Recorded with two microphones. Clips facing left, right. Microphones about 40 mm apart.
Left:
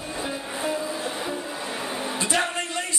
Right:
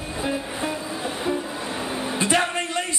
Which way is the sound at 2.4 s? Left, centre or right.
Centre.